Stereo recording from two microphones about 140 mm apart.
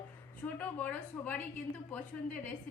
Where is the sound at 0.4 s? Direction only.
10° left (ahead or behind).